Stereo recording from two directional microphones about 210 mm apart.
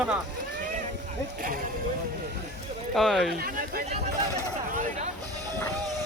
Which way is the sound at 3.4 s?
45° right (ahead or behind).